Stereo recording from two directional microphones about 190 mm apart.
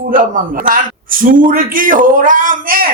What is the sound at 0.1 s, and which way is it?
Speech, 45° right (ahead or behind).